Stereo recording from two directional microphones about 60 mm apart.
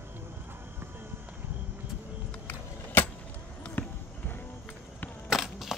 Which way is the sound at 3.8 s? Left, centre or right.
Left.